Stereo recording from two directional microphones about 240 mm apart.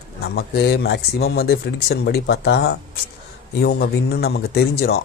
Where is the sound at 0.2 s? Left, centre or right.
Left.